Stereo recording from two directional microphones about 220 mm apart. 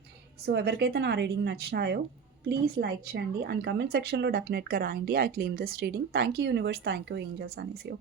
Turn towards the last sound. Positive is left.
turn(degrees=-50)  # may be behind; listen again after turning